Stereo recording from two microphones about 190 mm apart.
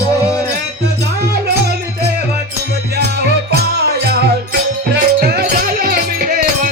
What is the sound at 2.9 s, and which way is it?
Music, 55° right (ahead or behind).